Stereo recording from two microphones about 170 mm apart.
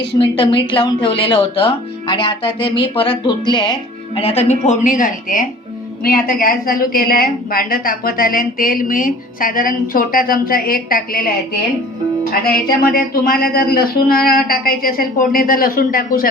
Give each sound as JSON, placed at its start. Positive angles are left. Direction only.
{"t": 0.2, "sound": "a woman's voice", "side_deg": 30}
{"t": 12.3, "sound": "a woman's voice", "side_deg": 60}